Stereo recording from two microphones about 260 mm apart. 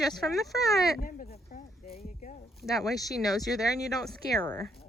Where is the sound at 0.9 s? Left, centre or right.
Left.